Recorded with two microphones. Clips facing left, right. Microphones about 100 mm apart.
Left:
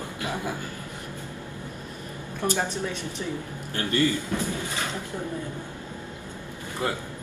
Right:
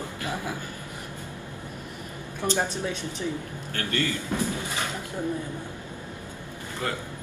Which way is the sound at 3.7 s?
20° left (ahead or behind).